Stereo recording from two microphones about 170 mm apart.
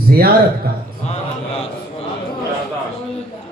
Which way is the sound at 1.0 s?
40° left (ahead or behind).